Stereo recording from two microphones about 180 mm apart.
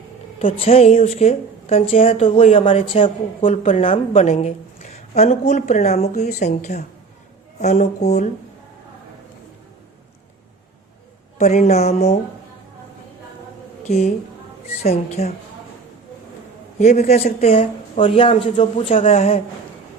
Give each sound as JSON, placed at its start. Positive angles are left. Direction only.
{"t": 0.6, "sound": "speech", "side_deg": 35}
{"t": 11.3, "sound": "speech", "side_deg": 40}
{"t": 13.8, "sound": "a woman's voice", "side_deg": 40}
{"t": 16.7, "sound": "speech", "side_deg": 45}